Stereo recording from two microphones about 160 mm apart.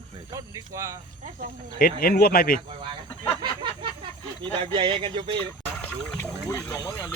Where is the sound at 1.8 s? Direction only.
70° left (ahead or behind).